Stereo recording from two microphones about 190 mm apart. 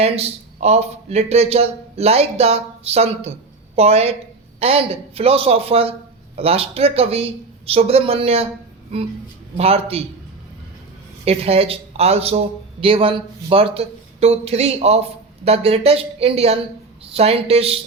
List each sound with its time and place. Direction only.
0.0 s speech: 35° right (ahead or behind)
9.6 s speech: 30° right (ahead or behind)
11.3 s speech: 30° right (ahead or behind)